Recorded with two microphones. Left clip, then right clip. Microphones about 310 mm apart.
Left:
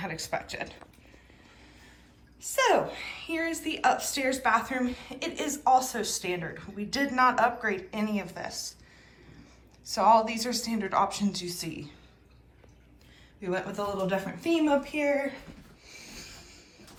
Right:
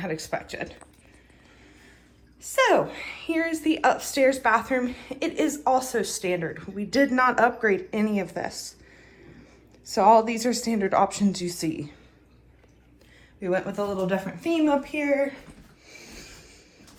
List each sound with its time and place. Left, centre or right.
0.0 s speech: centre
2.4 s a woman's voice: centre
9.9 s a woman's voice: centre
13.4 s a woman's voice: centre
15.9 s a sound: centre